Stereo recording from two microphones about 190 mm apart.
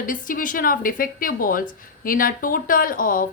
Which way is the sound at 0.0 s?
45° left (ahead or behind).